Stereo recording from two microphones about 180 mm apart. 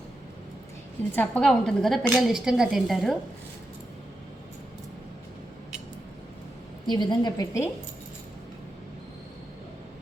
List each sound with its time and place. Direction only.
1.1 s a woman's voice: 10° left (ahead or behind)
6.8 s a woman's voice: 25° left (ahead or behind)